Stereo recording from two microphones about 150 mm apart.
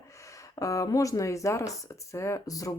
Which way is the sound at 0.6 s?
20° left (ahead or behind).